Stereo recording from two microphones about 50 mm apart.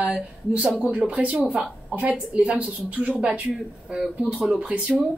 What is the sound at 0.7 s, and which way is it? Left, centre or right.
A woman's voice, right.